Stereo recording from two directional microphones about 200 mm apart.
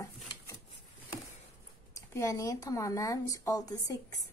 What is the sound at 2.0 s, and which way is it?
Speech, 15° left (ahead or behind).